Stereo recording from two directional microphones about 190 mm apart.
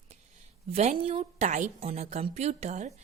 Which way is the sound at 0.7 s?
35° right (ahead or behind).